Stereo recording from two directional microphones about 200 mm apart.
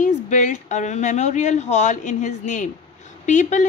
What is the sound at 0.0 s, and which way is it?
A woman's voice, 40° left (ahead or behind).